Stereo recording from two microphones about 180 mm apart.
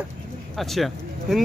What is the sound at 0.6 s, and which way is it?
Speech, centre (ahead or behind).